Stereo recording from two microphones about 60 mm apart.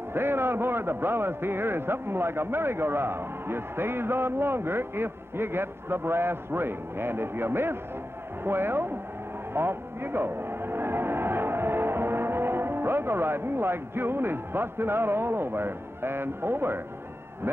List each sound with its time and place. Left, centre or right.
0.1 s a man's voice: right